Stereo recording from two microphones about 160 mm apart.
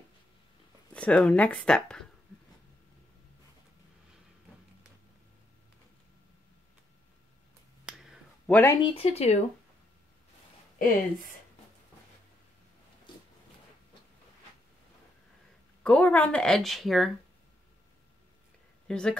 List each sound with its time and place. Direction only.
0.9 s speech: 10° left (ahead or behind)
7.8 s finger snapping: 5° right (ahead or behind)
8.5 s speech: 10° left (ahead or behind)
8.8 s speech: 40° left (ahead or behind)
10.8 s speech: 60° left (ahead or behind)
15.8 s speech: 10° left (ahead or behind)
18.9 s speech: 5° left (ahead or behind)